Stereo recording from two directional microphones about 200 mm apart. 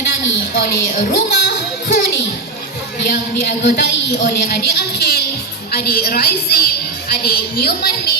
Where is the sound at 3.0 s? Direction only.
55° left (ahead or behind).